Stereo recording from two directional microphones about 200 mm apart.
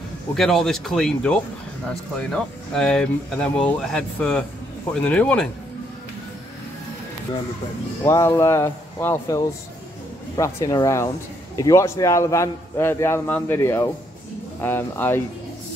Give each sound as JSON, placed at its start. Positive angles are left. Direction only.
{"t": 0.3, "sound": "speech", "side_deg": 0}
{"t": 8.0, "sound": "a man's voice", "side_deg": 15}